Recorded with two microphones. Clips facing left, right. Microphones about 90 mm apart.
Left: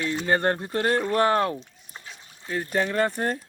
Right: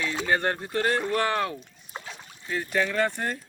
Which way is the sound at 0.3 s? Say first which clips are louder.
Left 3 dB; 35° left (ahead or behind).